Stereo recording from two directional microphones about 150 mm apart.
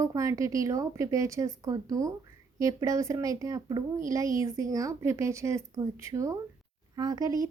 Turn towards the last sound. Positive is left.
turn(degrees=-25)  # may be behind; listen again after turning